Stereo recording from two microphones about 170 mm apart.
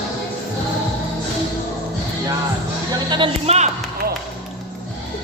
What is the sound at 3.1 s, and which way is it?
Speech, 30° right (ahead or behind).